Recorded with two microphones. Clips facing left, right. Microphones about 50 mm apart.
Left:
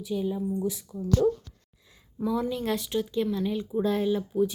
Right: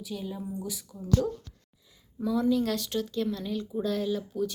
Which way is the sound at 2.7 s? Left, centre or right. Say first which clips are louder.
Left 3 dB; centre.